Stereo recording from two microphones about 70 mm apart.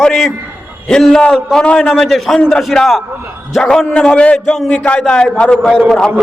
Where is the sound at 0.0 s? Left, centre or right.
Centre.